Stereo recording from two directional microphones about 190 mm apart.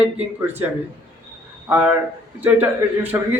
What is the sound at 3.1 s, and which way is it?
Speech, 15° right (ahead or behind).